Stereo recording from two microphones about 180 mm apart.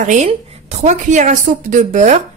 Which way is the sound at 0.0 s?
40° right (ahead or behind).